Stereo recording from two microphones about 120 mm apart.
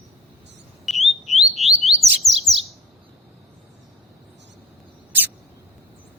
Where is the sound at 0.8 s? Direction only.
Centre (ahead or behind).